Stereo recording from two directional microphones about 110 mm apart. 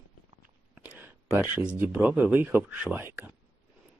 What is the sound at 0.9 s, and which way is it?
Speech, 20° right (ahead or behind).